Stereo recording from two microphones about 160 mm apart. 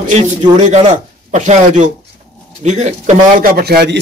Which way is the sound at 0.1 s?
50° right (ahead or behind).